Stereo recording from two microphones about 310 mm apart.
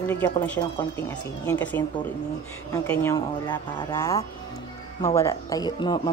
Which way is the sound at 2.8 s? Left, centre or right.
Centre.